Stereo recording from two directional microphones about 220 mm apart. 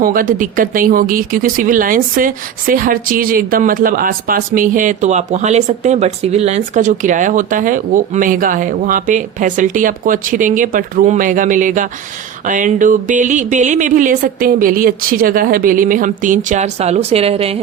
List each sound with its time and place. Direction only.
0.0 s speech: 40° right (ahead or behind)